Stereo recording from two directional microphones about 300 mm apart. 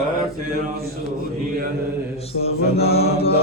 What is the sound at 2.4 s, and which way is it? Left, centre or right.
Mantra, centre.